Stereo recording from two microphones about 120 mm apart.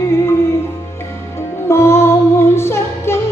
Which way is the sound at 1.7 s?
20° left (ahead or behind).